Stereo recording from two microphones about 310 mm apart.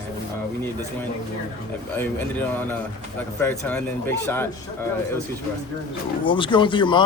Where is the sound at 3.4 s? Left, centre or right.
Centre.